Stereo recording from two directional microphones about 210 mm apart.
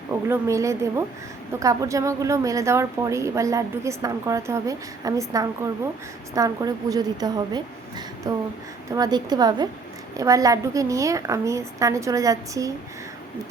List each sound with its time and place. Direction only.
0.3 s a woman's voice: 15° right (ahead or behind)